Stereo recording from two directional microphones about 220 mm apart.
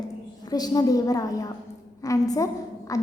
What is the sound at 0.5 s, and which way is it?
A woman's voice, 15° left (ahead or behind).